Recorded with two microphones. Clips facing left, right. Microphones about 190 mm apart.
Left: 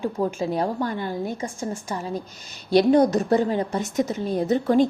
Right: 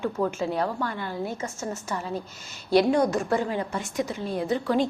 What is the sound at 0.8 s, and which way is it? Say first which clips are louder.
Speech: left 4 dB; 15° left (ahead or behind).